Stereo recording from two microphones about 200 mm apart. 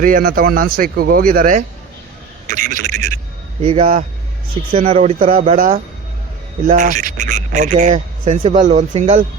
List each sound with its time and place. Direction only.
0.0 s a man's voice: 45° right (ahead or behind)
3.6 s speech: 30° right (ahead or behind)